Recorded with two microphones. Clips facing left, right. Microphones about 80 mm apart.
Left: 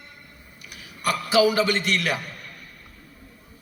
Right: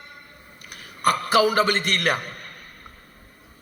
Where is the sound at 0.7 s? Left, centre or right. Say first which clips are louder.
Right 4 dB; right.